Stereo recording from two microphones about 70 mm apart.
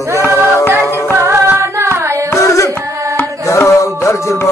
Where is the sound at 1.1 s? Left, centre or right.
Right.